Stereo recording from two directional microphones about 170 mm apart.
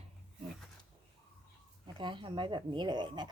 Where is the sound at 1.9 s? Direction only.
30° right (ahead or behind).